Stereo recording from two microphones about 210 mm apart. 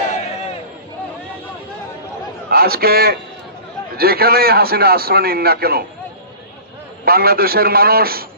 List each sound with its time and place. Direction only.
2.5 s a man's voice: 45° right (ahead or behind)
7.1 s a man's voice: 45° right (ahead or behind)